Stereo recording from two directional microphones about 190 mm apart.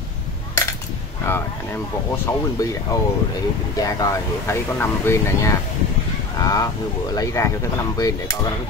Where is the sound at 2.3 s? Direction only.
15° left (ahead or behind).